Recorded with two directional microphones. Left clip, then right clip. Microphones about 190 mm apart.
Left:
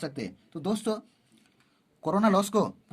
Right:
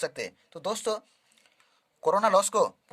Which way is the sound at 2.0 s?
25° right (ahead or behind).